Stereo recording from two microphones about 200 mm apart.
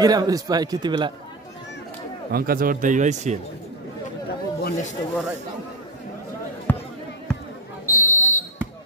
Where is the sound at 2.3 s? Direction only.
45° right (ahead or behind).